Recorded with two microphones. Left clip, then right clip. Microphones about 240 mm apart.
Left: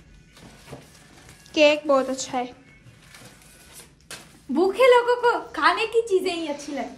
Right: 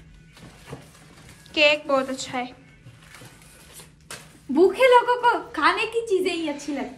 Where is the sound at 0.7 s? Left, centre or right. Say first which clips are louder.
Right 1 dB; centre.